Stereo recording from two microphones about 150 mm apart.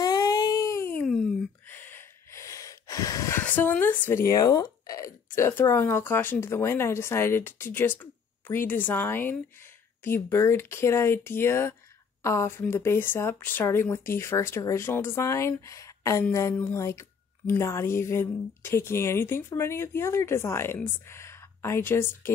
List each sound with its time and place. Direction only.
0.0 s a sound: 25° left (ahead or behind)
1.7 s snort: 15° left (ahead or behind)
4.0 s speech: 15° left (ahead or behind)